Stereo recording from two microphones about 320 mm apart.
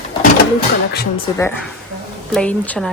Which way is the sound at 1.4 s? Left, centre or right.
Centre.